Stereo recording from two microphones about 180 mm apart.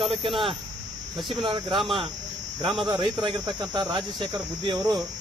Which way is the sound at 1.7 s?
Centre (ahead or behind).